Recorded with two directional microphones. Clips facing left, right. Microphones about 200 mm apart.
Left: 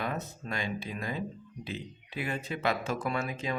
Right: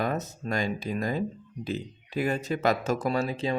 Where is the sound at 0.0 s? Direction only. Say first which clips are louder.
Right 6 dB; 45° right (ahead or behind).